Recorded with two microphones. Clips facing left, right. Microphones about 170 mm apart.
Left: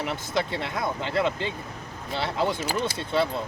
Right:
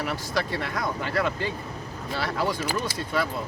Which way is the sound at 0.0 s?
20° left (ahead or behind).